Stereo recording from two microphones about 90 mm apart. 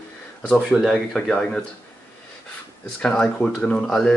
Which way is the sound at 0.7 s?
5° right (ahead or behind).